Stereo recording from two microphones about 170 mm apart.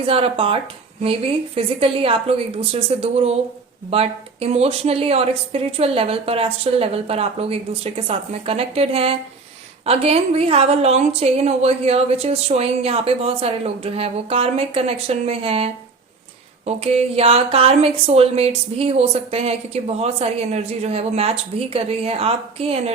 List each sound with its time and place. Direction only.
0.0 s speech: 35° right (ahead or behind)